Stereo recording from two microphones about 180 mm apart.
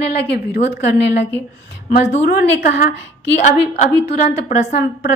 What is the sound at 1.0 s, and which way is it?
A woman's voice, 75° left (ahead or behind).